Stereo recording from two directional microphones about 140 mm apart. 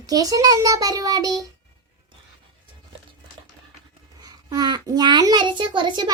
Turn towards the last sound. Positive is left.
turn(degrees=-35)  # may be behind; listen again after turning